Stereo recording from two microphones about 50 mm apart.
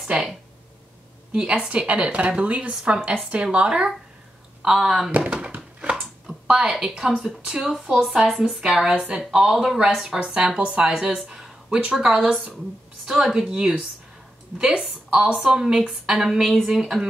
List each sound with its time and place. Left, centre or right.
0.0 s speech: centre
1.3 s speech: centre
4.6 s speech: centre
5.2 s a sound: centre
5.8 s speech: centre
11.2 s a sound: centre
11.9 s speech: centre
15.0 s speech: centre